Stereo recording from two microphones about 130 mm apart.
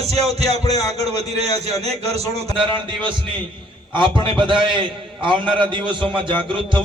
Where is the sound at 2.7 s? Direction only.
40° right (ahead or behind).